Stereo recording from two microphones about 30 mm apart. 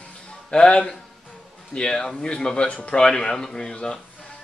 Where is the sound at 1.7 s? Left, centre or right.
Left.